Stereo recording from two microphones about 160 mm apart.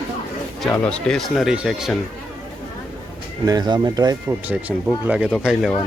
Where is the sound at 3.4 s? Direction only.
25° right (ahead or behind).